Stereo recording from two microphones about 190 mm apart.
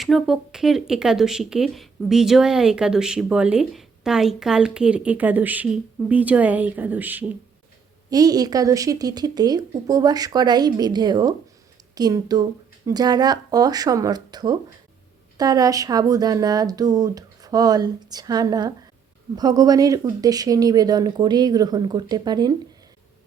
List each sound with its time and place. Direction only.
0.0 s speech: centre (ahead or behind)
8.1 s speech: 20° right (ahead or behind)